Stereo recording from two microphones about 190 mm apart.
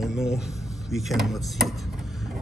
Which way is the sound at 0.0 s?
Centre (ahead or behind).